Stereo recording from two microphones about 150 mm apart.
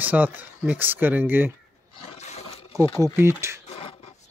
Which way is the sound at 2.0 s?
45° left (ahead or behind).